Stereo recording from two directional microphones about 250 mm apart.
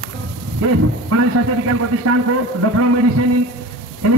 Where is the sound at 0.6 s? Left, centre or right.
Right.